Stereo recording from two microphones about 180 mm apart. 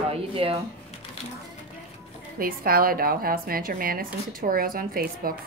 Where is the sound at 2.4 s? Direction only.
55° right (ahead or behind).